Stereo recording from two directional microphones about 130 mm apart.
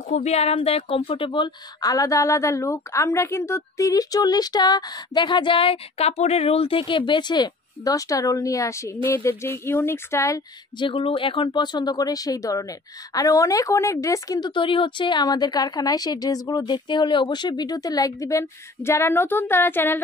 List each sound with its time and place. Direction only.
0.1 s a woman's voice: 55° left (ahead or behind); by 10.4 s 25° left (ahead or behind)
10.8 s a woman's voice: 40° left (ahead or behind); by 20.0 s 15° left (ahead or behind)